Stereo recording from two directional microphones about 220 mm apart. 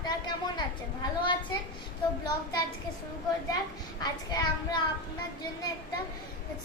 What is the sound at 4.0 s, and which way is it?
Child singing, 20° left (ahead or behind).